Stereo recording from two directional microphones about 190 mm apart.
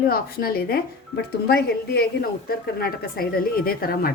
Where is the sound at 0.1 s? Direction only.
55° left (ahead or behind).